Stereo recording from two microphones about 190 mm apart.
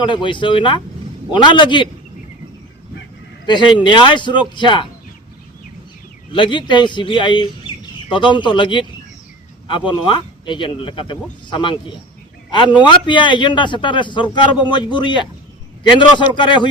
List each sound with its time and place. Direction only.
0.0 s a man's voice: 25° left (ahead or behind)
3.4 s a man's voice: 25° left (ahead or behind)
6.3 s a man's voice: 25° left (ahead or behind)
7.7 s bird: 25° left (ahead or behind)
8.1 s a man's voice: 25° left (ahead or behind)